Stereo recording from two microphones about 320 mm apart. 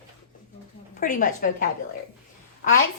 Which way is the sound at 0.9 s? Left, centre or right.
Left.